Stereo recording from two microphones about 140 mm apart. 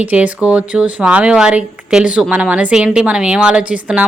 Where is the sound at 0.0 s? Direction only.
10° right (ahead or behind).